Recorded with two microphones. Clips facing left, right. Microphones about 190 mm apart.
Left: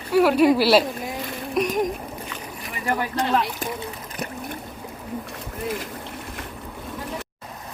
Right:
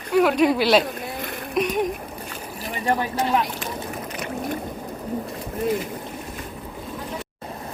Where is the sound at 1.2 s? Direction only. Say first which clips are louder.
Even; 55° right (ahead or behind).